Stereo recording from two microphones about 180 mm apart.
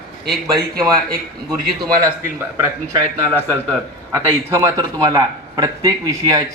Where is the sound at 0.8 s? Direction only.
20° right (ahead or behind).